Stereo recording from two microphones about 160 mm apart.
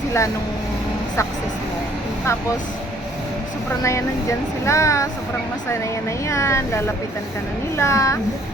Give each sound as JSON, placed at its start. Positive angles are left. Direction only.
{"t": 3.8, "sound": "speech", "side_deg": 20}